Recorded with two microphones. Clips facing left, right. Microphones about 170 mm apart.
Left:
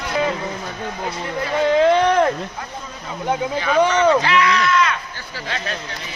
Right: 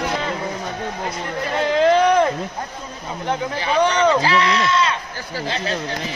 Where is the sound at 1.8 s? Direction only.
Centre (ahead or behind).